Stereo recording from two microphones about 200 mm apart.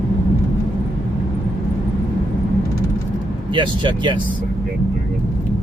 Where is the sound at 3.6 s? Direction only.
25° right (ahead or behind).